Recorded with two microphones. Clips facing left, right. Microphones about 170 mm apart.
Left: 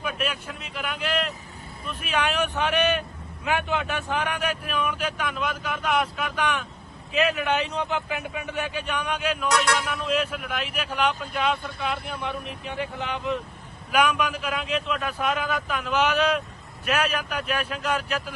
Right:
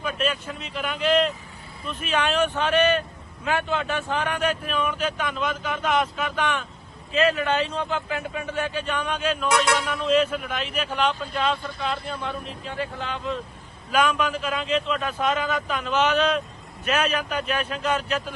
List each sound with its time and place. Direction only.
0.0 s a man's voice: 10° left (ahead or behind)
12.5 s a man's voice: 15° left (ahead or behind)